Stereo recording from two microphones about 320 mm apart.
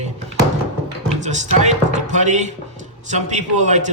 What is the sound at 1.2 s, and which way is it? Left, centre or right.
A man's voice, right.